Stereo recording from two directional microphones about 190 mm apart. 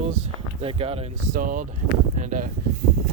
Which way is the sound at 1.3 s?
45° right (ahead or behind).